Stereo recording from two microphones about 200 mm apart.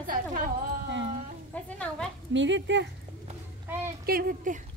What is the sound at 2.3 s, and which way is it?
Speech, 65° right (ahead or behind).